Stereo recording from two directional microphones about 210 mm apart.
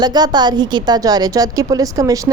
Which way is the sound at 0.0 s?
20° right (ahead or behind).